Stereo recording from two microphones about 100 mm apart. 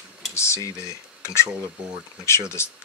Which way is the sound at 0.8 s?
30° left (ahead or behind).